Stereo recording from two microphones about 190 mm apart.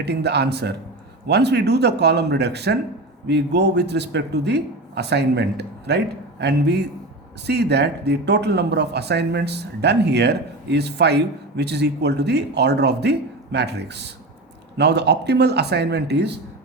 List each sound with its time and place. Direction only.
0.0 s speech: 60° right (ahead or behind)